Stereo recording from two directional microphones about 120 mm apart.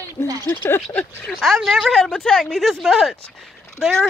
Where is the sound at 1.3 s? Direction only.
5° right (ahead or behind).